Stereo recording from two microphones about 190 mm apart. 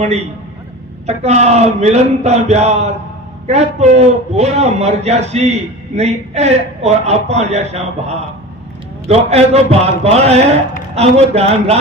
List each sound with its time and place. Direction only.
1.0 s a man's voice: 35° right (ahead or behind)